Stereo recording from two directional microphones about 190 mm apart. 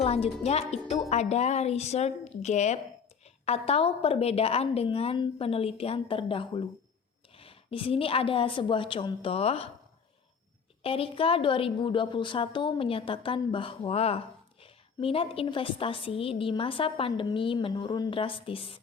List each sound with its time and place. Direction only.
0.0 s a woman's voice: 35° left (ahead or behind)
10.8 s a woman's voice: 30° left (ahead or behind)